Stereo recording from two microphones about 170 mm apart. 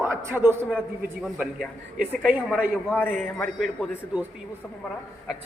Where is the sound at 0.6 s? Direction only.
Centre (ahead or behind).